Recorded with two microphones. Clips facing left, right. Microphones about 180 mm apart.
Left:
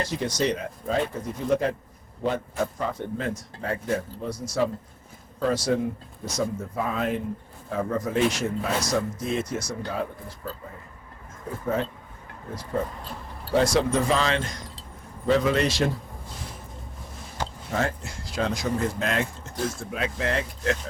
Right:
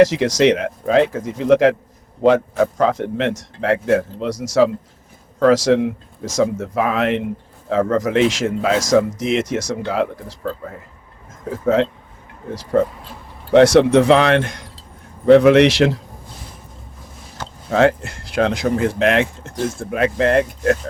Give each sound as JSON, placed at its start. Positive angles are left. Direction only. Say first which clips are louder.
{"t": 0.0, "sound": "speech", "louder": "right 13 dB", "side_deg": -90}
{"t": 17.7, "sound": "speech", "louder": "right 14 dB", "side_deg": -75}
{"t": 19.8, "sound": "speech", "louder": "right 11 dB", "side_deg": -60}